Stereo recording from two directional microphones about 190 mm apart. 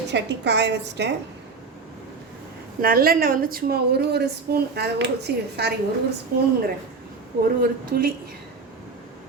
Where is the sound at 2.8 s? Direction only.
50° right (ahead or behind).